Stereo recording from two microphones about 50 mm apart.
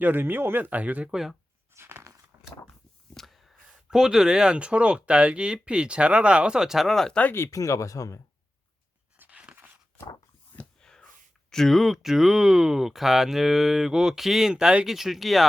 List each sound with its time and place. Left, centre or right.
0.0 s speech: right
0.8 s speech: right
1.1 s speech: centre
1.7 s a sound: right
3.2 s a sound: centre
3.8 s speech: centre
6.8 s speech: centre
7.3 s speech: left
9.1 s a sound: right
10.8 s a sound: centre
11.5 s speech: centre
14.5 s speech: right
14.8 s speech: centre